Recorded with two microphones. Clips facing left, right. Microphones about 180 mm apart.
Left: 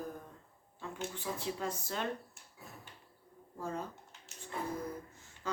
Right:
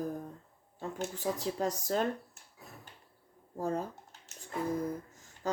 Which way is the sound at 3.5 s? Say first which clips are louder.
Right 6 dB; 40° right (ahead or behind).